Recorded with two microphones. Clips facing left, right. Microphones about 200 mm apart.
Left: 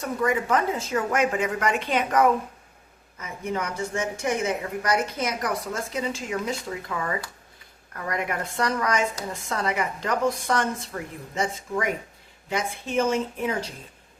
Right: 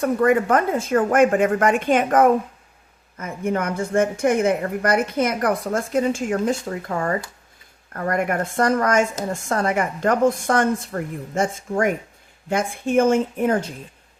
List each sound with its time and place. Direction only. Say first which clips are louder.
0.0 s a woman's voice: right 7 dB; 55° right (ahead or behind)